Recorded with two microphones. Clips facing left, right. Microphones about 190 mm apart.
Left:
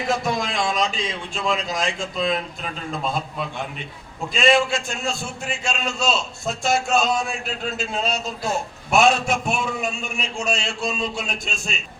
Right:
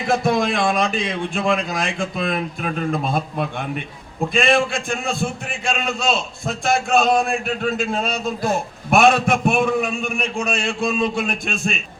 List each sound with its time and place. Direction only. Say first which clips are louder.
0.1 s a man's voice: right 7 dB; 55° right (ahead or behind)